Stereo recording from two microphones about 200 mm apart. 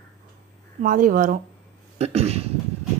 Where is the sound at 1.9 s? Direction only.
30° right (ahead or behind).